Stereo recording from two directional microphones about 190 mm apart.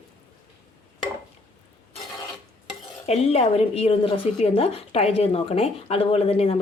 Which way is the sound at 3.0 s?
35° left (ahead or behind).